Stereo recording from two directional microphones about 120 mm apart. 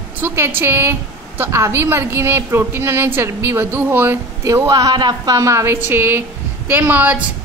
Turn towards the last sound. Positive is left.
turn(degrees=-15)  # may be behind; listen again after turning